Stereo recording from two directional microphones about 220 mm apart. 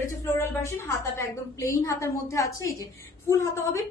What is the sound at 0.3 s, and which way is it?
A woman's voice, 10° left (ahead or behind).